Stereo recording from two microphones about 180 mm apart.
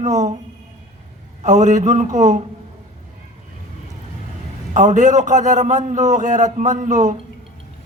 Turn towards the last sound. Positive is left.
turn(degrees=-45)  # may be behind; listen again after turning